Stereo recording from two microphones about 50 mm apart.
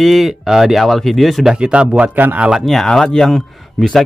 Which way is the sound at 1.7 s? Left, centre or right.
Right.